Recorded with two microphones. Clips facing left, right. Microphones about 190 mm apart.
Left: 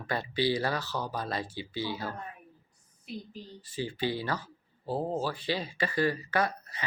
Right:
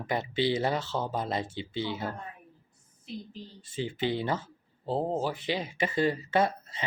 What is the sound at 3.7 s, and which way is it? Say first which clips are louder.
Speech: right 2 dB; 25° right (ahead or behind).